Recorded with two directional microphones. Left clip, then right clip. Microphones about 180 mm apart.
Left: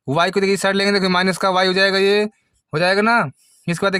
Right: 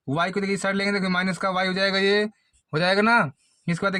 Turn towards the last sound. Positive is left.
turn(degrees=45)  # may be behind; listen again after turning